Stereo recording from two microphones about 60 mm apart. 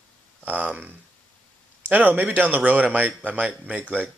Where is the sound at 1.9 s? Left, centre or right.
Right.